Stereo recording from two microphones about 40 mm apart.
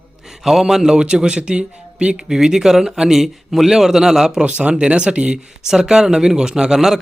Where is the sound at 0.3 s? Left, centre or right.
Centre.